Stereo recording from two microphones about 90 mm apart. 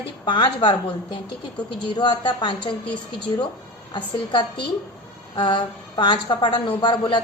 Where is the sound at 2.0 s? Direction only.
55° left (ahead or behind).